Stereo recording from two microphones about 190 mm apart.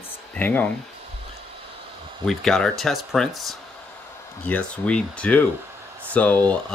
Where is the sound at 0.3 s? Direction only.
10° left (ahead or behind).